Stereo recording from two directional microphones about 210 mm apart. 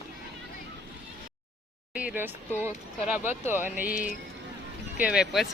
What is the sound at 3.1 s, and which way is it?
Speech, 10° right (ahead or behind).